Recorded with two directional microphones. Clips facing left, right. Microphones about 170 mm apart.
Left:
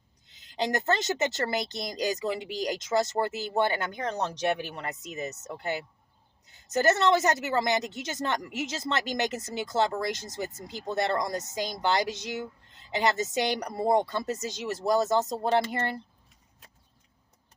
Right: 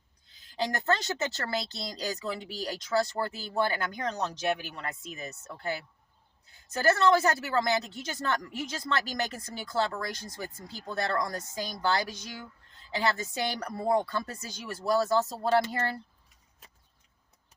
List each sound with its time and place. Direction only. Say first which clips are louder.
0.3 s speech: left 3 dB; 20° left (ahead or behind)